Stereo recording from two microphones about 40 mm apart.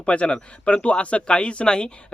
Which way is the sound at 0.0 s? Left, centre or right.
Left.